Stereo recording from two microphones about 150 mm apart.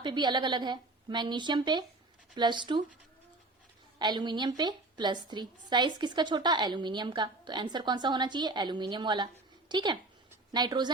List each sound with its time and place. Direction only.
0.0 s a woman's voice: 30° right (ahead or behind)
3.9 s a woman's voice: 30° right (ahead or behind)